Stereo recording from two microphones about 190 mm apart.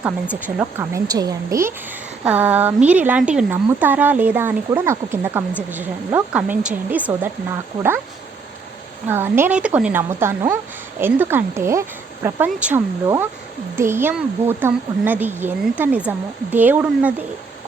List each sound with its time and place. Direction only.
0.3 s speech: 10° right (ahead or behind)
9.0 s speech: 10° right (ahead or behind)